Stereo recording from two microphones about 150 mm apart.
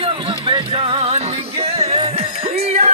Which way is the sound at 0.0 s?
35° right (ahead or behind).